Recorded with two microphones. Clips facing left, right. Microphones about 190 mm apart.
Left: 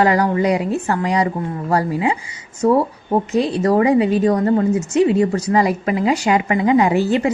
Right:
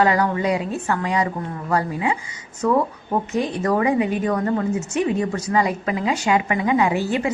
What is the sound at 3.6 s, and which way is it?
A woman's voice, 35° left (ahead or behind).